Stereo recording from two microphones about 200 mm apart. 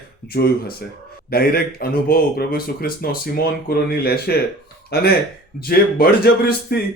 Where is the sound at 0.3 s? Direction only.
50° left (ahead or behind).